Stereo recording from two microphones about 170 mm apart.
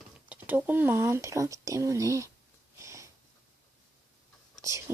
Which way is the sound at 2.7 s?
15° right (ahead or behind).